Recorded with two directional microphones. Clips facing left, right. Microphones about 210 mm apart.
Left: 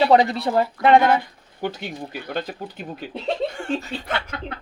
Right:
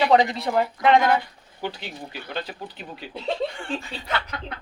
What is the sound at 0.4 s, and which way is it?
Speech, 35° left (ahead or behind).